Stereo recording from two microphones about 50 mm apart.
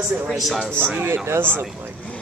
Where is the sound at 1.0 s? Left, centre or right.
Right.